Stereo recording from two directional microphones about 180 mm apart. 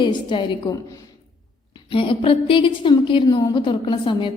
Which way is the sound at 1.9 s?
30° left (ahead or behind).